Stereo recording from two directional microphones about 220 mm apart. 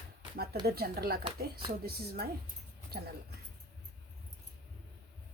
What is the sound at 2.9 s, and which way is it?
Speech, 45° right (ahead or behind).